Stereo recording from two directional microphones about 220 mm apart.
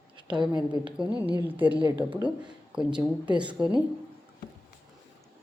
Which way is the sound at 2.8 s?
20° right (ahead or behind).